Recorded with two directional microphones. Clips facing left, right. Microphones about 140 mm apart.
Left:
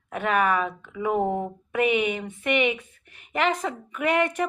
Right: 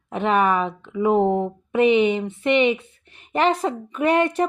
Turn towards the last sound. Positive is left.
turn(degrees=-30)  # may be behind; listen again after turning